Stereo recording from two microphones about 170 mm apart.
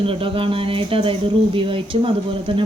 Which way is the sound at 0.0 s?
30° right (ahead or behind).